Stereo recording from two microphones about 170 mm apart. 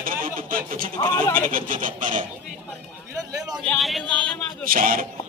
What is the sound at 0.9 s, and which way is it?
Speech, 20° left (ahead or behind).